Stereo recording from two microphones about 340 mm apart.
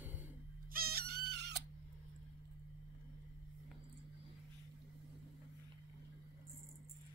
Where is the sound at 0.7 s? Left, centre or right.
Right.